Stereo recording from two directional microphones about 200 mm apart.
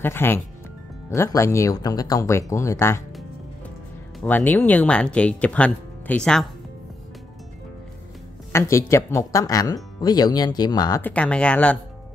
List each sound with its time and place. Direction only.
0.0 s speech: 10° left (ahead or behind)
4.2 s speech: 10° left (ahead or behind)
8.5 s speech: 15° left (ahead or behind)